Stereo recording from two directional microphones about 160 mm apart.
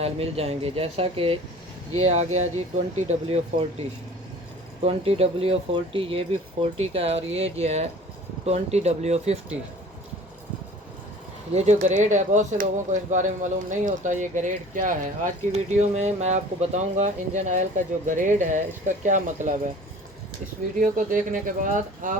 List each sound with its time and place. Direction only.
0.0 s speech: 40° right (ahead or behind)
11.5 s speech: 45° right (ahead or behind)
20.7 s speech: 55° right (ahead or behind)